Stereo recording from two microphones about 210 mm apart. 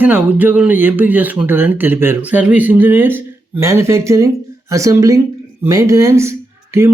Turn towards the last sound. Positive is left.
turn(degrees=-15)  # may be behind; listen again after turning